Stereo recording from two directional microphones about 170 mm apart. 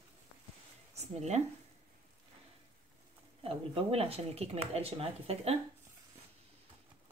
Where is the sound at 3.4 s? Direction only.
35° right (ahead or behind).